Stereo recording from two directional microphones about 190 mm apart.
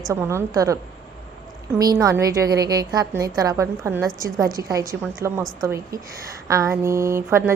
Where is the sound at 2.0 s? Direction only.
20° right (ahead or behind).